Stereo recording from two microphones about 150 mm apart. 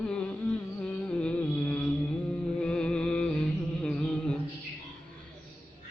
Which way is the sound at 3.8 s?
5° left (ahead or behind).